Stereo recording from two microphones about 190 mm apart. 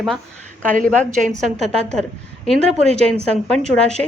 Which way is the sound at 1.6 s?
35° right (ahead or behind).